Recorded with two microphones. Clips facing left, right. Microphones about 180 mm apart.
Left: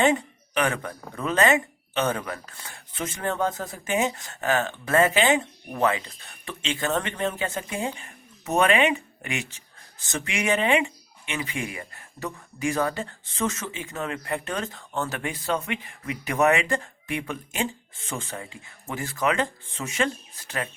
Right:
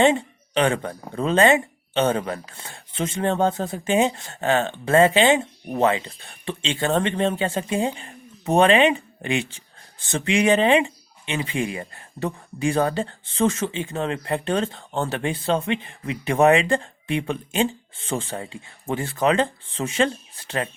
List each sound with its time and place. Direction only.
0.0 s speech: 25° right (ahead or behind)